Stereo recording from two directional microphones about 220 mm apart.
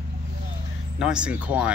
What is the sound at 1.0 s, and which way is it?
Speech, 5° right (ahead or behind).